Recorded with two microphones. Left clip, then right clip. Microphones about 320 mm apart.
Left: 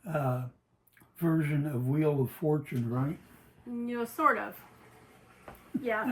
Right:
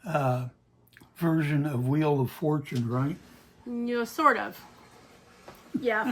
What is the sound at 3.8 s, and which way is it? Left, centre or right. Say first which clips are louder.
Speech: right 4 dB; right.